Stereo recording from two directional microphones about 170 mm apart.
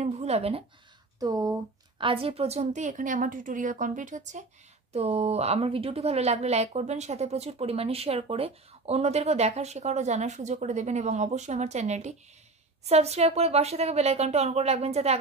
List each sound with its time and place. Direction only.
0.0 s a sound: 40° right (ahead or behind)
1.2 s speech: 20° right (ahead or behind)
2.0 s a woman's voice: 30° right (ahead or behind)